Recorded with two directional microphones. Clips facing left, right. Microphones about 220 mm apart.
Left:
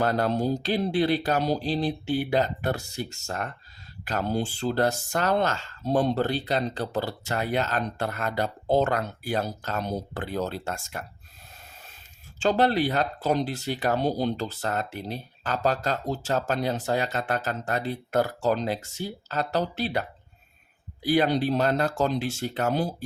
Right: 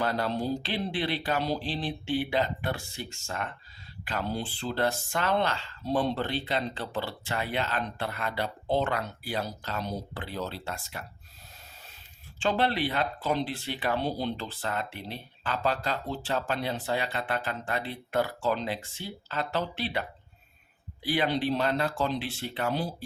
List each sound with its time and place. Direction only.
0.0 s speech: 45° left (ahead or behind)
12.4 s speech: 40° left (ahead or behind)